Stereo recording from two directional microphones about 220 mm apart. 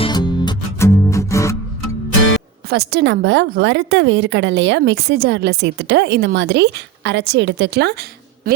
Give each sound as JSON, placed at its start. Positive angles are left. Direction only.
{"t": 0.0, "sound": "music", "side_deg": 20}
{"t": 2.6, "sound": "a woman's voice", "side_deg": -50}